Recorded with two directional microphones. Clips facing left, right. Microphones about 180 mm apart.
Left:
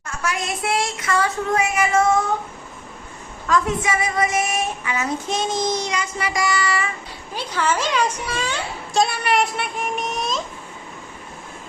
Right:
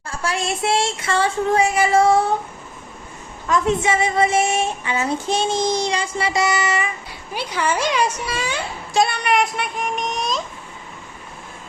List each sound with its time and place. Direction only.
0.1 s speech: 30° right (ahead or behind)
3.4 s speech: 25° right (ahead or behind); by 10.4 s centre (ahead or behind)